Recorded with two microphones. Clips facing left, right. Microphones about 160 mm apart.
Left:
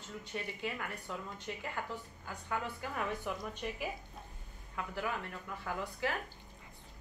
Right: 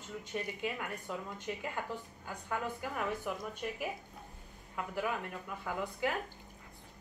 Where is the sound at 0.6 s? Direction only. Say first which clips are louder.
Right 2 dB; 10° right (ahead or behind).